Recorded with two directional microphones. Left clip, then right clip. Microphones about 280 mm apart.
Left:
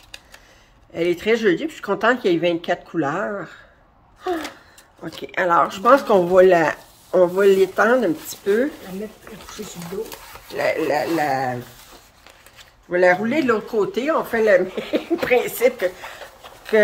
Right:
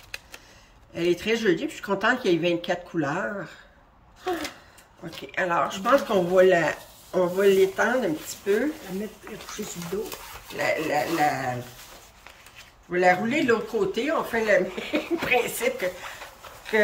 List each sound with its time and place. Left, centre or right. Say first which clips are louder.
0.9 s speech: left 5 dB; centre
5.3 s speech: left 7 dB; centre
10.5 s speech: left 5 dB; centre
12.9 s speech: left 5 dB; centre